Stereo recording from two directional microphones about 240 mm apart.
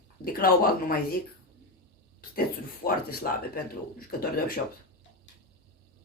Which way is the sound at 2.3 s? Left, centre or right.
Left.